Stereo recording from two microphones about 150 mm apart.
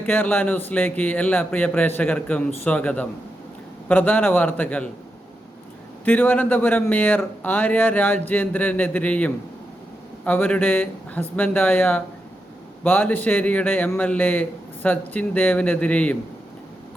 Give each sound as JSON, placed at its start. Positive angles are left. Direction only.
{"t": 0.0, "sound": "a man's voice", "side_deg": 10}
{"t": 6.1, "sound": "a man's voice", "side_deg": 10}